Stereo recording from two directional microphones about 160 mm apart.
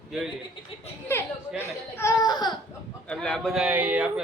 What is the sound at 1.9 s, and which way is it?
Speech, 20° left (ahead or behind).